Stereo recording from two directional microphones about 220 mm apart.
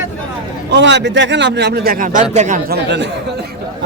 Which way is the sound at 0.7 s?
50° right (ahead or behind).